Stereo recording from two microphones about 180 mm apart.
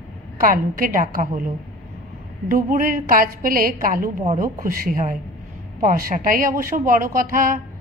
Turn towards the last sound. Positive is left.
turn(degrees=-50)  # may be behind; listen again after turning